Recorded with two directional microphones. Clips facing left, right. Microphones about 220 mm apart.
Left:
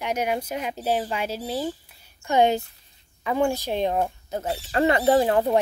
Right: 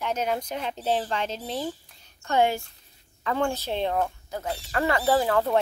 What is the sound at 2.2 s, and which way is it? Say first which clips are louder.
Speech: left 3 dB; 20° left (ahead or behind).